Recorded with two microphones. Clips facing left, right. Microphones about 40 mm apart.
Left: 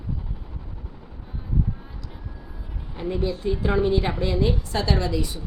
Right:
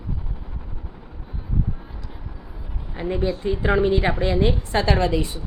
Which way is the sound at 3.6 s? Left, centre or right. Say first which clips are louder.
Right 3 dB; right.